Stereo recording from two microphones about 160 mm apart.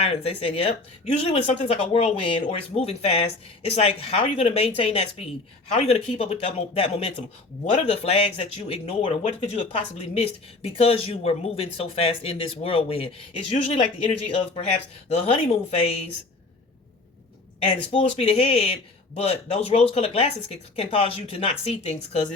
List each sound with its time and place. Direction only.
0.0 s speech: 40° left (ahead or behind)
17.7 s speech: 40° left (ahead or behind)